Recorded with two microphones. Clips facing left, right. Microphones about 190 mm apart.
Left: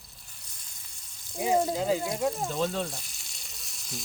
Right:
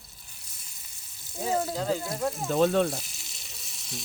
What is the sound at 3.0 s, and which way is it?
Frying, centre (ahead or behind).